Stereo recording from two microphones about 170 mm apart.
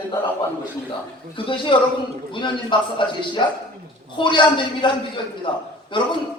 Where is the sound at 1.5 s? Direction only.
30° left (ahead or behind).